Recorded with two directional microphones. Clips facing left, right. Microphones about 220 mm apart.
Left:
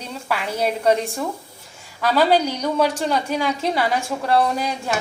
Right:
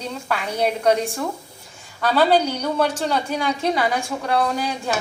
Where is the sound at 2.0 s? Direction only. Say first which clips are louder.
Even; 10° left (ahead or behind).